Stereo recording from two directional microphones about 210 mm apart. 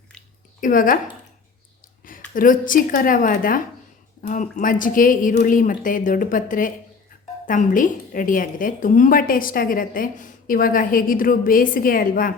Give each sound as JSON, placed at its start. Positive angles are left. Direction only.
{"t": 0.6, "sound": "a woman's voice", "side_deg": 40}
{"t": 2.3, "sound": "a woman's voice", "side_deg": 40}